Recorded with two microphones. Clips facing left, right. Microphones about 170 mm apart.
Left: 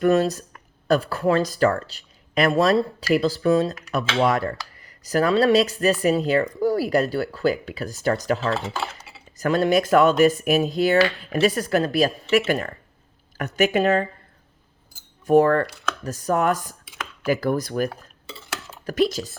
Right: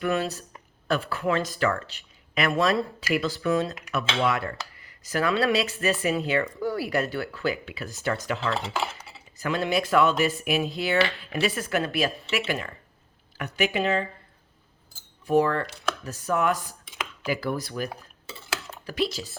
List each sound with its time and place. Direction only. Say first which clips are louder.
0.0 s speech: left 8 dB; 40° left (ahead or behind)
8.7 s dishes: even; 15° right (ahead or behind)
9.4 s speech: left 6 dB; 40° left (ahead or behind)
15.3 s speech: left 6 dB; 45° left (ahead or behind)
15.6 s speech: left 1 dB; 20° right (ahead or behind)
16.0 s speech: left 4 dB; 40° left (ahead or behind)
18.9 s speech: left 7 dB; 45° left (ahead or behind)